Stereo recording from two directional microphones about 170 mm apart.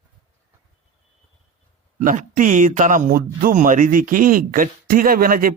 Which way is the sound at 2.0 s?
50° right (ahead or behind).